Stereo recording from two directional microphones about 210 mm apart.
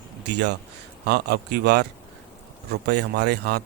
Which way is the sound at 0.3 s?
55° right (ahead or behind).